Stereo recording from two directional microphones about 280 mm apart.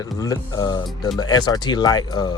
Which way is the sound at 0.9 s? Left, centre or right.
Centre.